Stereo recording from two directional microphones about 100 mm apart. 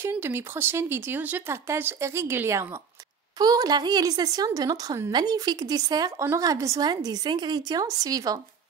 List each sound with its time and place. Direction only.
0.0 s speech: 25° right (ahead or behind)
3.3 s a woman's voice: 40° right (ahead or behind)